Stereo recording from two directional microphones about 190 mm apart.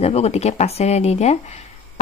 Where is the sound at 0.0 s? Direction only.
35° left (ahead or behind).